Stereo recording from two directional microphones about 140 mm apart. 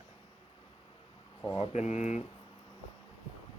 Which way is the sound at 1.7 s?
55° left (ahead or behind).